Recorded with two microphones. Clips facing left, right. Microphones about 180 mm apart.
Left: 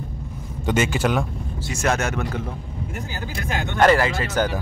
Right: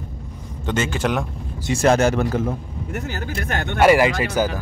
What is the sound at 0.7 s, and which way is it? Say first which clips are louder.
Speech: left 1 dB; 10° left (ahead or behind).